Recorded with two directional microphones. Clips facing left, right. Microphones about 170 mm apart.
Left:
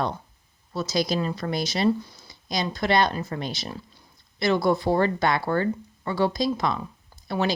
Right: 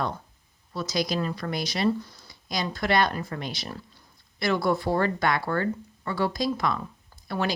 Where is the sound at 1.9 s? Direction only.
10° left (ahead or behind).